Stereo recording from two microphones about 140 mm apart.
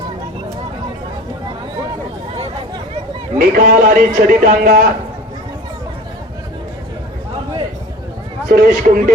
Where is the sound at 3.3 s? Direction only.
85° right.